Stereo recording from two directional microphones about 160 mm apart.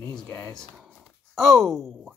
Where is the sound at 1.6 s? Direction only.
Centre (ahead or behind).